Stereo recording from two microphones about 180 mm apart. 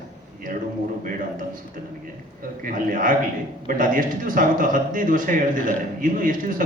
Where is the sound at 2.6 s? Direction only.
50° right (ahead or behind).